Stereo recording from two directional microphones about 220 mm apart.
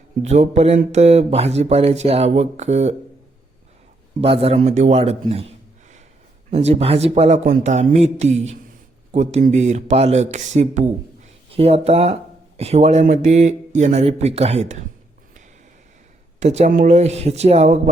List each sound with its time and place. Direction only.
0.2 s speech: 30° right (ahead or behind)
4.2 s speech: 25° right (ahead or behind)
6.5 s speech: 30° right (ahead or behind)
16.4 s speech: 30° right (ahead or behind)